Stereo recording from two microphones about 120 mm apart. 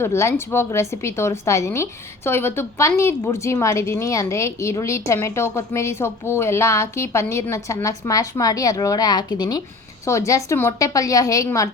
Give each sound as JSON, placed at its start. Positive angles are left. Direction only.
{"t": 0.0, "sound": "a woman's voice", "side_deg": 25}